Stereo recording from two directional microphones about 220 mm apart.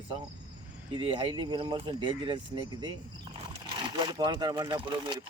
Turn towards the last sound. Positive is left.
turn(degrees=-25)  # may be behind; listen again after turning